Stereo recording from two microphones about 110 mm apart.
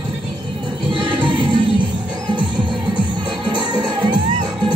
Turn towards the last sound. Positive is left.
turn(degrees=-45)  # may be behind; listen again after turning